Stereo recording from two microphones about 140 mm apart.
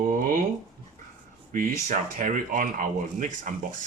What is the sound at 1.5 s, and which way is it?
Speech, 65° right (ahead or behind).